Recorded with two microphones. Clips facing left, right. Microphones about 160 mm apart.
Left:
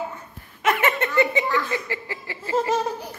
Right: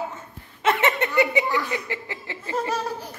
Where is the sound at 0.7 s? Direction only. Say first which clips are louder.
Even; 20° right (ahead or behind).